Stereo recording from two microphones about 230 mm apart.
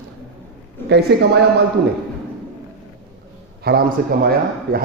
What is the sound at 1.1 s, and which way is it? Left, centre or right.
Speech, right.